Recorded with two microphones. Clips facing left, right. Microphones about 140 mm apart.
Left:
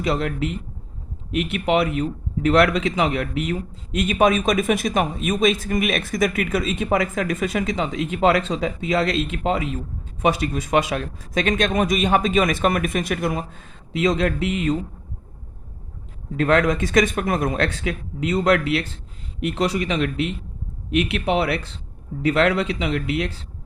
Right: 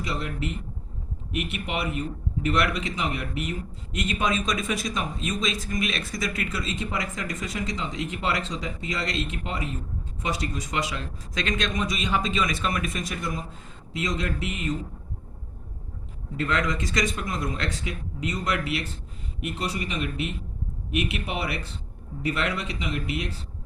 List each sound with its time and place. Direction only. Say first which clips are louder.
0.0 s a man's voice: left 8 dB; 65° left (ahead or behind)
16.4 s a man's voice: left 8 dB; 60° left (ahead or behind)
19.5 s speech: left 9 dB; 75° left (ahead or behind)
21.0 s a man's voice: left 9 dB; 65° left (ahead or behind)